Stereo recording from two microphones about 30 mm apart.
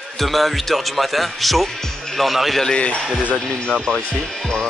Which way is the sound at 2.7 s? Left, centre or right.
Left.